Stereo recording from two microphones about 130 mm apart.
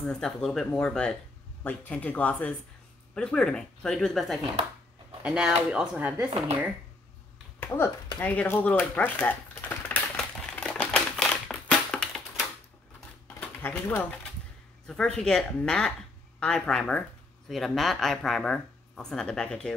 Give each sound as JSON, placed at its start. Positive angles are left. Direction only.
{"t": 0.0, "sound": "speech", "side_deg": 5}
{"t": 7.6, "sound": "speech", "side_deg": 15}
{"t": 8.2, "sound": "typewriter", "side_deg": 15}
{"t": 13.4, "sound": "a sound", "side_deg": 15}
{"t": 14.9, "sound": "speech", "side_deg": 5}